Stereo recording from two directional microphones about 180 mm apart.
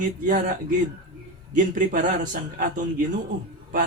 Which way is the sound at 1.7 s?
45° right (ahead or behind).